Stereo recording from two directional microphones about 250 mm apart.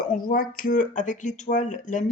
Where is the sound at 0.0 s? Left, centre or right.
Left.